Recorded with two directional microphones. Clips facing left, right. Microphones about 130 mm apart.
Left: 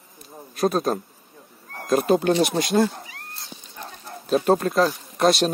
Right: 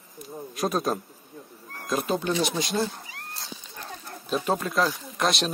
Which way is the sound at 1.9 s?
55° left (ahead or behind).